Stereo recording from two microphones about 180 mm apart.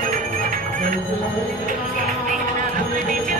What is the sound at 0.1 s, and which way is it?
Bell, 45° right (ahead or behind).